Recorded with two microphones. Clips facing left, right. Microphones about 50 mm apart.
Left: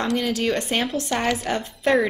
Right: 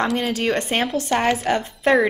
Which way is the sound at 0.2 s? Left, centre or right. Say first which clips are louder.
Right 1 dB; right.